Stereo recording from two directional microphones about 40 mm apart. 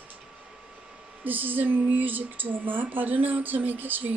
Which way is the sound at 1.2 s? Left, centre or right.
Right.